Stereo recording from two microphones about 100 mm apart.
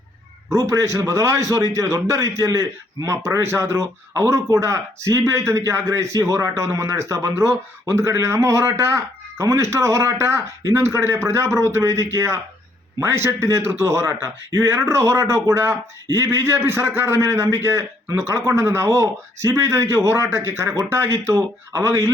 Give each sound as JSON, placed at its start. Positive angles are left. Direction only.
{"t": 0.5, "sound": "a man's voice", "side_deg": -30}